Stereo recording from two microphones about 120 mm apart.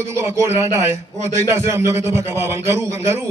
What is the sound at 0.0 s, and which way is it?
Speech, 25° right (ahead or behind).